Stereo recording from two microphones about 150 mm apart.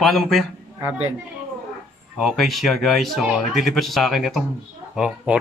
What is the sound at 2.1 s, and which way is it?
Speech, centre (ahead or behind).